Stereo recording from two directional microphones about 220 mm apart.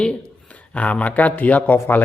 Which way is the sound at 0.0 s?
5° left (ahead or behind).